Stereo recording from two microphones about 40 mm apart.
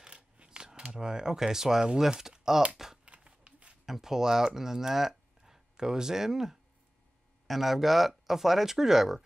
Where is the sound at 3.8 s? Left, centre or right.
Centre.